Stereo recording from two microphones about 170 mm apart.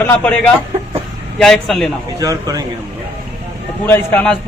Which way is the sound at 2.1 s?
20° right (ahead or behind).